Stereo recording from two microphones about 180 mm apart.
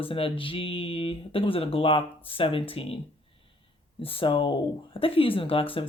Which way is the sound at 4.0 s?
30° left (ahead or behind).